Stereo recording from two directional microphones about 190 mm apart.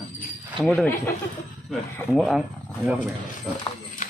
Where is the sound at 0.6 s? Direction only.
Centre (ahead or behind).